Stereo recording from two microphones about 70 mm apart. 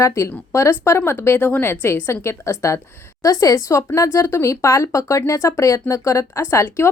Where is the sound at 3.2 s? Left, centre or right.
Left.